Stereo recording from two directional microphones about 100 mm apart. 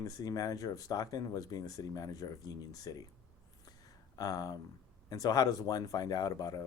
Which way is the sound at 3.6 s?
40° left (ahead or behind).